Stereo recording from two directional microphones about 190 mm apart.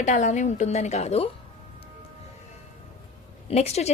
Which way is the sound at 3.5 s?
35° left (ahead or behind).